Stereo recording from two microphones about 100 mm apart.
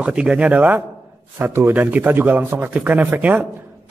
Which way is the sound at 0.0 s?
10° right (ahead or behind).